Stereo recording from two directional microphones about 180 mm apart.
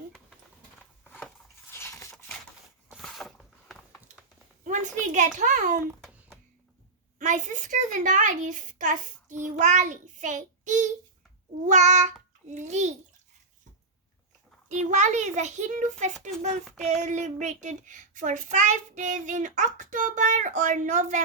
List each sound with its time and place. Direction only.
1.7 s a sound: 15° left (ahead or behind)
2.9 s a sound: centre (ahead or behind)
4.6 s a woman's voice: 45° right (ahead or behind)
7.2 s a child's voice: 45° right (ahead or behind)
14.7 s a child's voice: 40° right (ahead or behind)
16.6 s child singing: centre (ahead or behind)
17.0 s a child's voice: 40° right (ahead or behind)